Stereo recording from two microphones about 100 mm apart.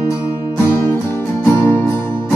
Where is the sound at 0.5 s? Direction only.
30° left (ahead or behind).